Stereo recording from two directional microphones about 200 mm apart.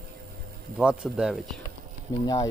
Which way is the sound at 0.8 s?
5° right (ahead or behind).